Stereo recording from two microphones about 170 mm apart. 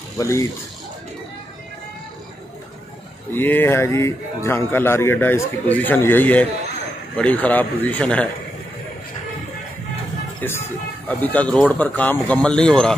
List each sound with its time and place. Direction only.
0.2 s a man's voice: 15° left (ahead or behind)
3.3 s a man's voice: 10° left (ahead or behind)
10.4 s a man's voice: 15° left (ahead or behind)